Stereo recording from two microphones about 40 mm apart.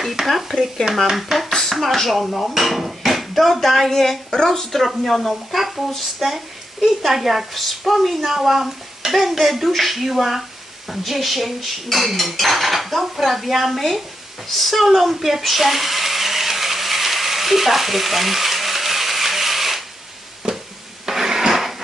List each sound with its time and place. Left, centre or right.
0.0 s a woman's voice: centre
14.8 s blender: centre
20.4 s music: centre
21.1 s a sound: centre